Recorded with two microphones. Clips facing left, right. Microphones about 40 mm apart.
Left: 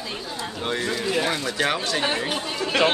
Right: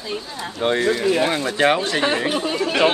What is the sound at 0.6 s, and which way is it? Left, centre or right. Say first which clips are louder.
Speech: right 8 dB; right.